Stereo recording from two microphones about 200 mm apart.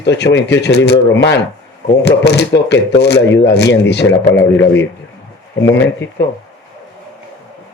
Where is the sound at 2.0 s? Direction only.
55° left (ahead or behind).